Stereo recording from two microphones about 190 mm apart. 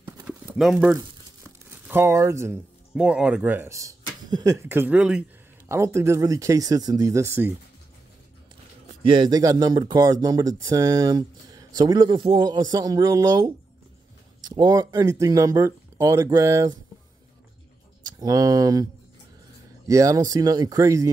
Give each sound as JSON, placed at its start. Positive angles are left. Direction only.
{"t": 0.0, "sound": "clip-clop", "side_deg": -5}
{"t": 1.9, "sound": "speech", "side_deg": -15}
{"t": 9.0, "sound": "speech", "side_deg": -25}
{"t": 18.0, "sound": "speech", "side_deg": -20}
{"t": 19.9, "sound": "speech", "side_deg": -15}